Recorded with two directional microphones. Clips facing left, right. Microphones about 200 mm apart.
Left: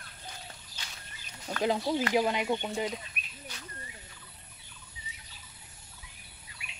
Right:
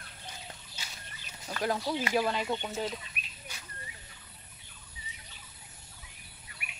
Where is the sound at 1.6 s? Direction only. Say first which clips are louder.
Left 3 dB; 20° left (ahead or behind).